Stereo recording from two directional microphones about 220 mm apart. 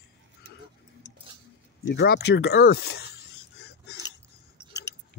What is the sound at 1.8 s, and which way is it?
Speech, 45° left (ahead or behind).